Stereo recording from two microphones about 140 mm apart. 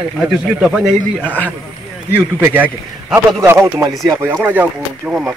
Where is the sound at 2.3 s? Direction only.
15° right (ahead or behind).